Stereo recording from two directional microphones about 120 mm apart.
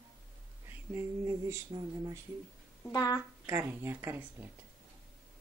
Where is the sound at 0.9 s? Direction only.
20° right (ahead or behind).